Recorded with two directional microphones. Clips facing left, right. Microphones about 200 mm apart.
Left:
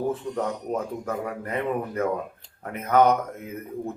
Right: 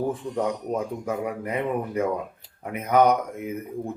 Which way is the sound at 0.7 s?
10° right (ahead or behind).